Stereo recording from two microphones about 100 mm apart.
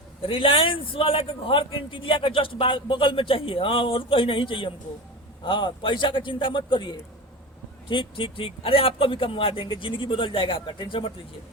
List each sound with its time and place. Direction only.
0.2 s a man's voice: 65° left (ahead or behind)